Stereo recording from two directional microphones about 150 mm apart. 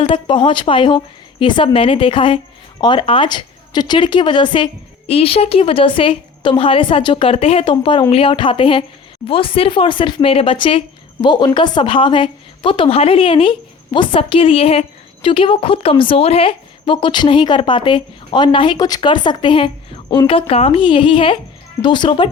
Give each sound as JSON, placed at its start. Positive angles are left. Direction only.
{"t": 0.0, "sound": "speech", "side_deg": 35}